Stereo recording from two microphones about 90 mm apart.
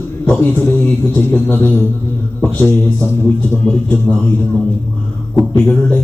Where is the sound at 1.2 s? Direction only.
20° left (ahead or behind).